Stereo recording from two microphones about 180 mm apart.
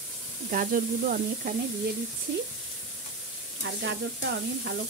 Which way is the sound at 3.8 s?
80° right.